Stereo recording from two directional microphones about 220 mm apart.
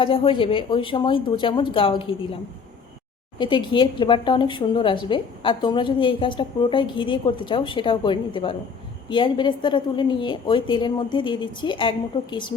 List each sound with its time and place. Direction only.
0.0 s speech: 25° left (ahead or behind)